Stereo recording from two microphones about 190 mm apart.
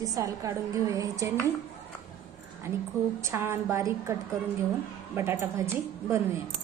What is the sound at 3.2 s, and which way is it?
Speech, 15° right (ahead or behind).